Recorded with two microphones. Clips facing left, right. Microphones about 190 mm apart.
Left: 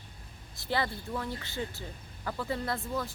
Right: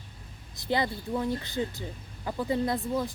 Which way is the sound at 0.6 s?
20° right (ahead or behind).